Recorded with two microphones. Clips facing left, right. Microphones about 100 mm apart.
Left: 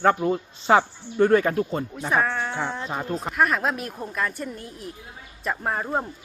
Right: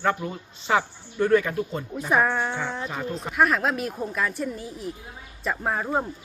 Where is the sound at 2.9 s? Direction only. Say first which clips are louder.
Left 2 dB; 30° left (ahead or behind).